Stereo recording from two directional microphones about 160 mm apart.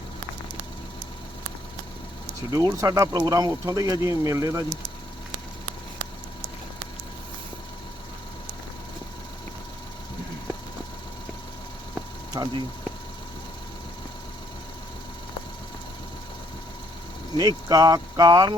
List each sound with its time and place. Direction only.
2.5 s speech: 20° right (ahead or behind)
12.3 s speech: 25° right (ahead or behind)
17.3 s speech: 25° right (ahead or behind)